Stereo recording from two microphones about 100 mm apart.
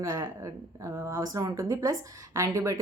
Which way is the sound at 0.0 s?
30° right (ahead or behind).